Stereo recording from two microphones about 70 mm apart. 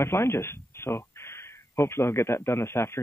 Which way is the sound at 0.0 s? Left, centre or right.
Left.